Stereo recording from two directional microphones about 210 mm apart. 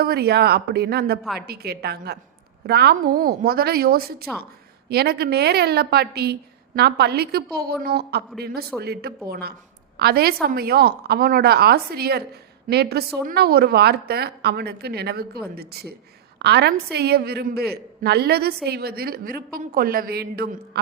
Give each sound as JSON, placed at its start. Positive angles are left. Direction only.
{"t": 0.0, "sound": "a woman's voice", "side_deg": -50}